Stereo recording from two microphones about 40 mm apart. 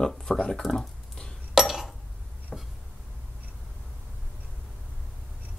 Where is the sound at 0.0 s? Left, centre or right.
Centre.